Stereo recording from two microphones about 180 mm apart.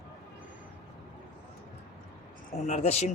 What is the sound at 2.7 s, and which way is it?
Speech, 35° left (ahead or behind).